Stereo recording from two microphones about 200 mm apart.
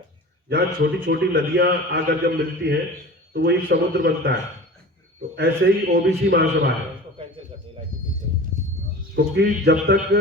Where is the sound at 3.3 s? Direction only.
55° right (ahead or behind).